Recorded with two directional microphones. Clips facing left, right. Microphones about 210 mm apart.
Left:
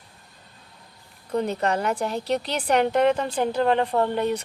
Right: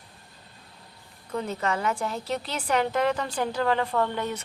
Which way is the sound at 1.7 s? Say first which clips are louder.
Left 3 dB; 35° left (ahead or behind).